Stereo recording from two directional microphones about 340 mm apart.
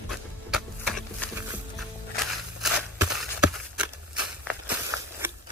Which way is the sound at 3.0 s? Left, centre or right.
Centre.